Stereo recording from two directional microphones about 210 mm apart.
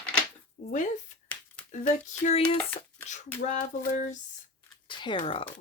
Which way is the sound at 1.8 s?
30° left (ahead or behind).